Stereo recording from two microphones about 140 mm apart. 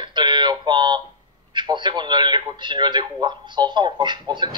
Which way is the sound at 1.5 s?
35° right (ahead or behind).